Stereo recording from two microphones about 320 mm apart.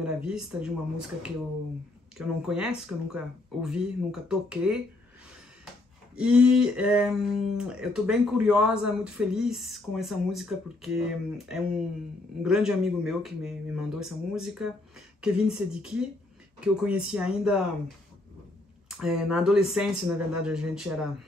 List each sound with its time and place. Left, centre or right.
0.0 s speech: centre
6.1 s speech: centre
18.9 s speech: centre